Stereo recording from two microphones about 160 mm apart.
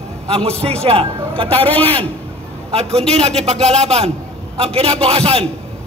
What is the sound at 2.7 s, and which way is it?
A man's voice, 40° right (ahead or behind).